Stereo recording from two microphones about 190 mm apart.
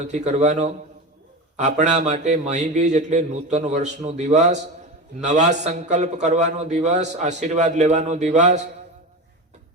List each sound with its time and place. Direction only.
0.0 s a man's voice: 35° right (ahead or behind)